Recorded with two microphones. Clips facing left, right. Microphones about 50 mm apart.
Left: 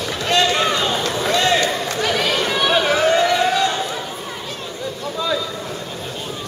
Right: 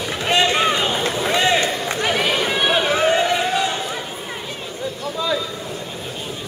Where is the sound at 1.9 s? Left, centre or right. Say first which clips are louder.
Even; right.